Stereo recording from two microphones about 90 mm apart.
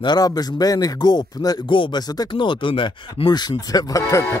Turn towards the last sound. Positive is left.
turn(degrees=35)  # may be behind; listen again after turning